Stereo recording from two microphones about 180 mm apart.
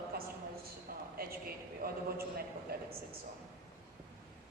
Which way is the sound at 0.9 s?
55° right (ahead or behind).